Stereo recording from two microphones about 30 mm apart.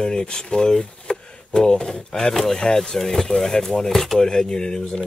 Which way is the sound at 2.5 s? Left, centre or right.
Left.